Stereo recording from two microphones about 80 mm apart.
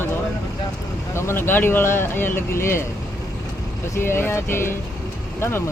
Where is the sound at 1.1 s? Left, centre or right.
Left.